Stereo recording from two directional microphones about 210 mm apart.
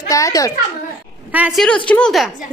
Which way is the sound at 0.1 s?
15° left (ahead or behind).